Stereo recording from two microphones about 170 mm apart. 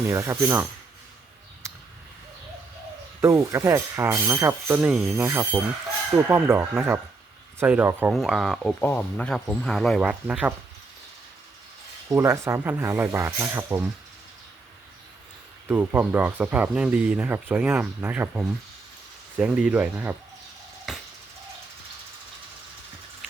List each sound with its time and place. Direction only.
0.1 s speech: 15° right (ahead or behind)
3.2 s speech: 20° right (ahead or behind)
8.1 s speech: centre (ahead or behind)
12.0 s speech: 15° right (ahead or behind)
15.6 s speech: 10° right (ahead or behind)
20.9 s music: 5° right (ahead or behind)